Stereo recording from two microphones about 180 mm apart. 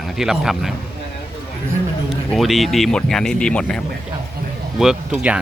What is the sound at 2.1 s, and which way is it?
A man's voice, centre (ahead or behind).